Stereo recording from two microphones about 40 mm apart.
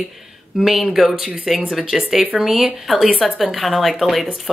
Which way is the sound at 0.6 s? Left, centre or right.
Centre.